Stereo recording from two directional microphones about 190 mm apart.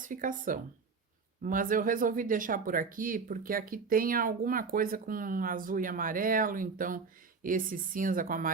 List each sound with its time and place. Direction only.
0.0 s speech: 45° right (ahead or behind)